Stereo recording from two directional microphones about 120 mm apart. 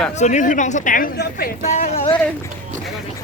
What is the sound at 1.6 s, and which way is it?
Speech, 70° left (ahead or behind).